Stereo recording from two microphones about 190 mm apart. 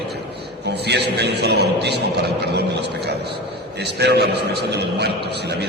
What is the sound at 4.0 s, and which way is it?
A man's voice, 60° right (ahead or behind).